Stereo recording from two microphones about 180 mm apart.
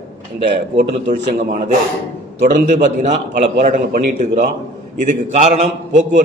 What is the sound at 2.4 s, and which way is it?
A man's voice, 45° right (ahead or behind).